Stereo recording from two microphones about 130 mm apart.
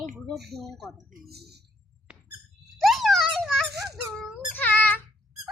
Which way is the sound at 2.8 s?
Centre (ahead or behind).